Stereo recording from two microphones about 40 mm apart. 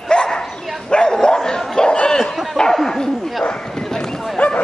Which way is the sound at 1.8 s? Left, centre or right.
Centre.